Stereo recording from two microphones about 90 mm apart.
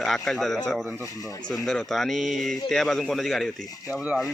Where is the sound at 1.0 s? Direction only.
40° left (ahead or behind).